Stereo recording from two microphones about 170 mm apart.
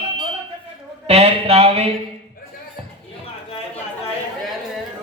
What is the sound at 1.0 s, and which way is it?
Speech, 35° right (ahead or behind).